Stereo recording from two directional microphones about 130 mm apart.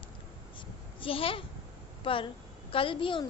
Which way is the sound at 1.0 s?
45° left (ahead or behind).